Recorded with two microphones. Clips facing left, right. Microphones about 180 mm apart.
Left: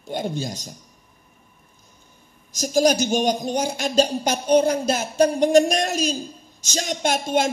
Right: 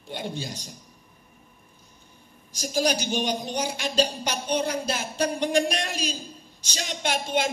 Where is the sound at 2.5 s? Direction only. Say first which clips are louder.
Left 7 dB; 45° left (ahead or behind).